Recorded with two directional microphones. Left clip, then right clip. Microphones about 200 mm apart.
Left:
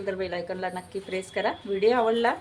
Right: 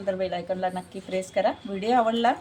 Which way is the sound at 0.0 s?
15° left (ahead or behind).